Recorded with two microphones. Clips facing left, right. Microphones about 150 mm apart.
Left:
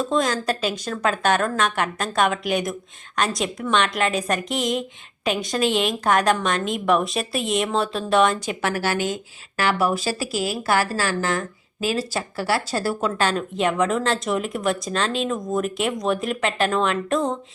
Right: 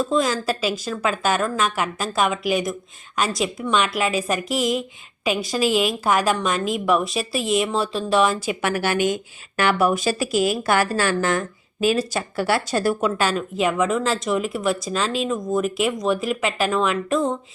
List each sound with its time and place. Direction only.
0.0 s speech: 5° right (ahead or behind)
8.7 s speech: 15° right (ahead or behind); by 17.3 s centre (ahead or behind)